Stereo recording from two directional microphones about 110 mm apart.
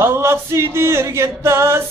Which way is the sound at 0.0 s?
20° right (ahead or behind).